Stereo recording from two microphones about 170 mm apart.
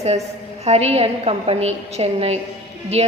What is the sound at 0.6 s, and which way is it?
A woman's voice, 40° right (ahead or behind).